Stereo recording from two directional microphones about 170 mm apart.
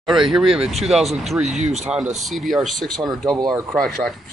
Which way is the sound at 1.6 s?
40° right (ahead or behind).